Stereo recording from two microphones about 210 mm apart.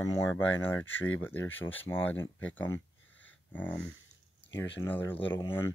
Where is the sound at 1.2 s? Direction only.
10° left (ahead or behind).